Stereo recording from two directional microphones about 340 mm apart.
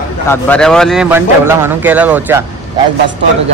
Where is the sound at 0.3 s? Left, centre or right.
Centre.